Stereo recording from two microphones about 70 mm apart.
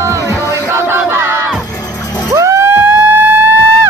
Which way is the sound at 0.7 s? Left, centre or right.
Right.